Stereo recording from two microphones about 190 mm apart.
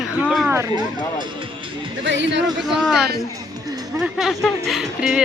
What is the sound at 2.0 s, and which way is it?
Speech, 70° right (ahead or behind).